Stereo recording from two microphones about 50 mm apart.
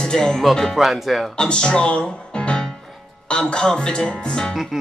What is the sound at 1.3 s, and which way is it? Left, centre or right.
Speech, centre.